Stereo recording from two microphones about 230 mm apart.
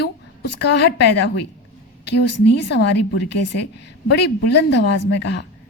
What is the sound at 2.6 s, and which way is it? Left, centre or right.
A woman's voice, left.